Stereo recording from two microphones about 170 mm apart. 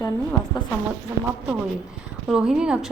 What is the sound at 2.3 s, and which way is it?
Speech, 5° right (ahead or behind).